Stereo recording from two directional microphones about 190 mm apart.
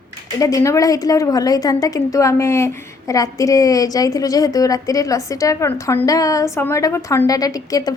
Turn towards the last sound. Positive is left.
turn(degrees=20)  # may be behind; listen again after turning